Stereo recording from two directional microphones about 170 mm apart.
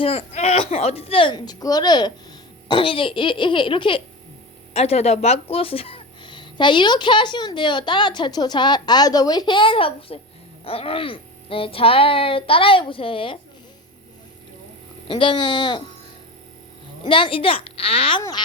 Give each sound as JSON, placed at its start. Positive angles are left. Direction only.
{"t": 0.0, "sound": "child singing", "side_deg": 35}
{"t": 2.6, "sound": "speech", "side_deg": 30}
{"t": 10.6, "sound": "child singing", "side_deg": 35}
{"t": 15.0, "sound": "speech", "side_deg": 30}
{"t": 17.0, "sound": "child singing", "side_deg": 30}
{"t": 18.2, "sound": "speech", "side_deg": 25}